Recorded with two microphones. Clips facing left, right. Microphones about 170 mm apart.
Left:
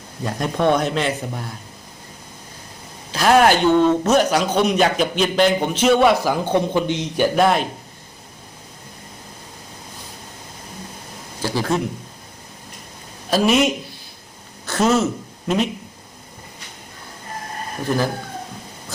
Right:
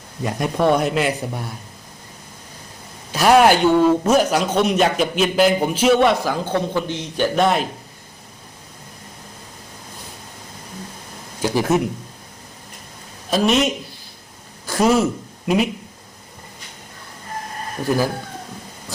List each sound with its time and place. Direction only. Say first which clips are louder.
0.2 s speech: right 1 dB; 10° right (ahead or behind)
3.1 s a man's voice: right 1 dB; 10° right (ahead or behind); by 6.3 s 5° left (ahead or behind)
6.3 s a man's voice: left 2 dB; 15° left (ahead or behind)
7.3 s a man's voice: even; centre (ahead or behind)
11.4 s speech: right 3 dB; 20° right (ahead or behind)
13.3 s a man's voice: left 1 dB; 5° left (ahead or behind)
14.7 s speech: right 1 dB; 10° right (ahead or behind)
17.8 s speech: right 1 dB; 10° right (ahead or behind)